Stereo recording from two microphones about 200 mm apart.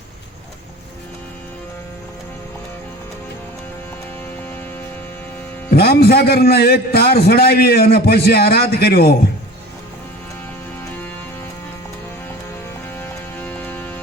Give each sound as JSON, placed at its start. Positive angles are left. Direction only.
{"t": 5.7, "sound": "a man's voice", "side_deg": 50}
{"t": 13.0, "sound": "music", "side_deg": 10}